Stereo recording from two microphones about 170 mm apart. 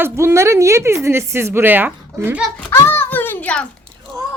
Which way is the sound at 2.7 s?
15° left (ahead or behind).